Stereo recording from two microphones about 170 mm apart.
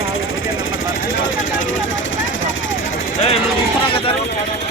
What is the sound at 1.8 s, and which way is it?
Vehicle, 90° left.